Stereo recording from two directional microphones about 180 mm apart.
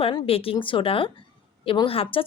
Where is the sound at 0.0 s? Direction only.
30° left (ahead or behind).